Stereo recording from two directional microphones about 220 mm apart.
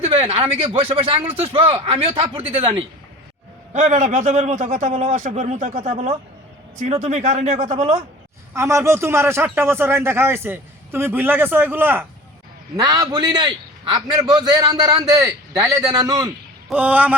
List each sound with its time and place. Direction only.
0.0 s a man's voice: 25° right (ahead or behind)
8.5 s a man's voice: 15° right (ahead or behind)